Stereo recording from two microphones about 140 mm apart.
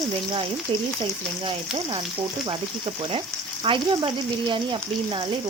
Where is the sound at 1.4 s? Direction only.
40° right (ahead or behind).